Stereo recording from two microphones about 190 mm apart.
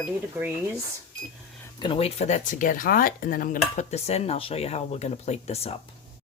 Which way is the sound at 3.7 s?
35° left (ahead or behind).